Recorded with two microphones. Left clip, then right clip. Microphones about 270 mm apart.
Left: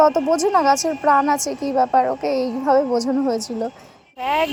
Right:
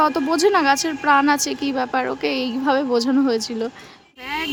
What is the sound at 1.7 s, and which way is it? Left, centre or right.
A woman's voice, centre.